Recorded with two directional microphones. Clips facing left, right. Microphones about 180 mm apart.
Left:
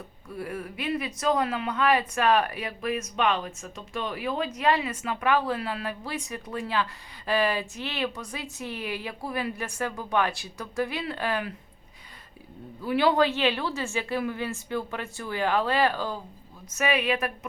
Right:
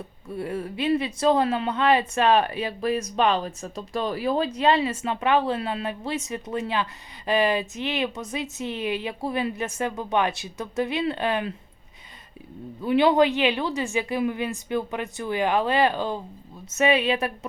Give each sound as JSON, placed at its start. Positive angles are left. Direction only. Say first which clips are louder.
{"t": 0.3, "sound": "speech", "louder": "right 5 dB", "side_deg": -25}
{"t": 12.8, "sound": "a woman's voice", "louder": "right 4 dB", "side_deg": -20}